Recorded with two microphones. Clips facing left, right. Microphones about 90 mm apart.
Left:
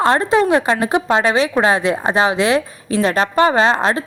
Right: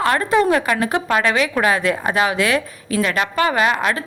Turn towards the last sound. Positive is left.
turn(degrees=30)  # may be behind; listen again after turning